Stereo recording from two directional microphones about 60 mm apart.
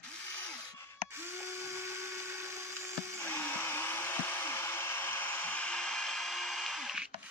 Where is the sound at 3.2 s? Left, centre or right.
Left.